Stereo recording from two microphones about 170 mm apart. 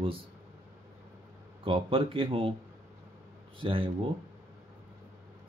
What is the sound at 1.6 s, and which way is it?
Speech, 30° right (ahead or behind).